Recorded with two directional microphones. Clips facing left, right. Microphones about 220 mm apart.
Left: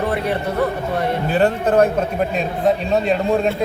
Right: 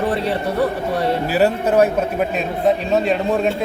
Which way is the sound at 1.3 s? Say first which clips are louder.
Left 1 dB; 5° right (ahead or behind).